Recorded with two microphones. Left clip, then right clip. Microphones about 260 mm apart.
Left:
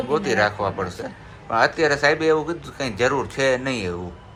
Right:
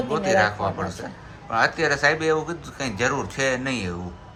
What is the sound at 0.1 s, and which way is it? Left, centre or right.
A man's voice, centre.